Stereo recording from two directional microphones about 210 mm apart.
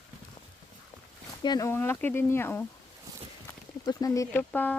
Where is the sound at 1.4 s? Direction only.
15° left (ahead or behind).